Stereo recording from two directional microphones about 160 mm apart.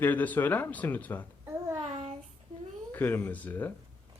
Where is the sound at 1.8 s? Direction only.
40° right (ahead or behind).